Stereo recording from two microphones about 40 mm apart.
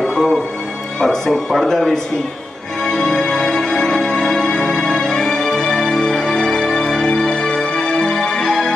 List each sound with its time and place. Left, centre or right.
0.1 s music: centre
1.0 s speech: centre
2.8 s music: centre